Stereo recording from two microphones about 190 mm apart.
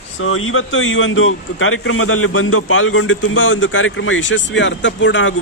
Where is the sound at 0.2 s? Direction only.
90° left.